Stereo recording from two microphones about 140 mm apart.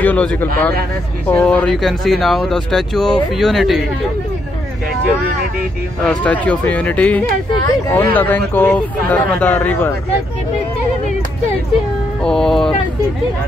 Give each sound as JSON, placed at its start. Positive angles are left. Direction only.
{"t": 0.0, "sound": "a man's voice", "side_deg": 10}
{"t": 6.0, "sound": "a man's voice", "side_deg": 10}
{"t": 12.2, "sound": "speech", "side_deg": 5}